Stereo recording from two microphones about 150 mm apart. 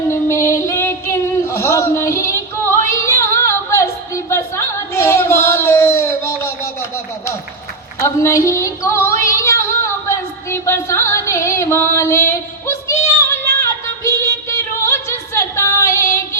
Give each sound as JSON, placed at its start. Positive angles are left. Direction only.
{"t": 0.1, "sound": "female singing", "side_deg": 20}
{"t": 7.9, "sound": "female singing", "side_deg": 20}